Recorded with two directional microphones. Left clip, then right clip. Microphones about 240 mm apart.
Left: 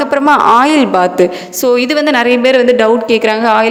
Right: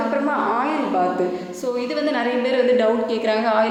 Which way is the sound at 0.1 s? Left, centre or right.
Left.